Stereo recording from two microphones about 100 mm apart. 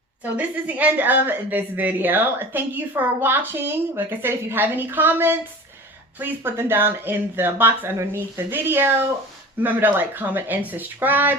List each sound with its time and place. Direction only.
0.2 s a woman's voice: 15° right (ahead or behind)